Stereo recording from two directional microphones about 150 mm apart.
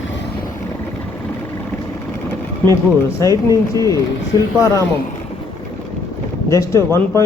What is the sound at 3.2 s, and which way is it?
Speech, 25° right (ahead or behind).